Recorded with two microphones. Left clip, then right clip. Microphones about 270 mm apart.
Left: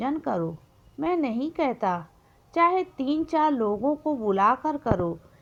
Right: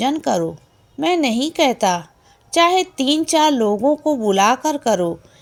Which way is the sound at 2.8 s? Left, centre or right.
Centre.